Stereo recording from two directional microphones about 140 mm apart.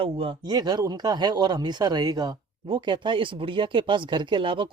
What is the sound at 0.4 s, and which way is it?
Speech, 30° right (ahead or behind).